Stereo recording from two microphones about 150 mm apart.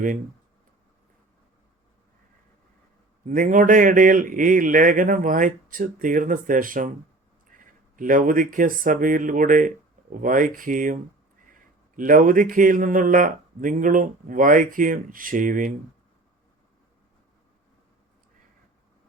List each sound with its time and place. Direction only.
3.2 s speech: 60° right (ahead or behind)